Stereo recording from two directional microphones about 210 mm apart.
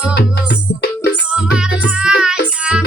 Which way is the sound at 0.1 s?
50° left (ahead or behind).